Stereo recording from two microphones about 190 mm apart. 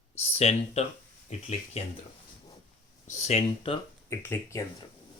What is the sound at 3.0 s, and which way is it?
Speech, 35° left (ahead or behind).